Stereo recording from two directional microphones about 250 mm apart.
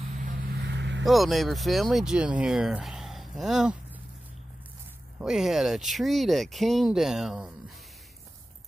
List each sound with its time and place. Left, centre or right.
0.2 s vehicle: right
1.0 s speech: centre
5.2 s speech: centre